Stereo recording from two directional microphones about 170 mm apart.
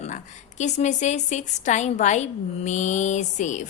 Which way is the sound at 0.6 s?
45° left (ahead or behind).